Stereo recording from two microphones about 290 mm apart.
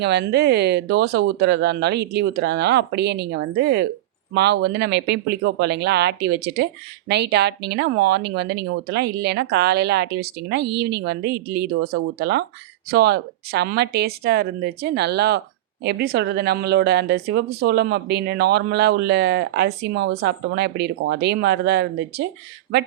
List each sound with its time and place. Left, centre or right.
0.0 s speech: right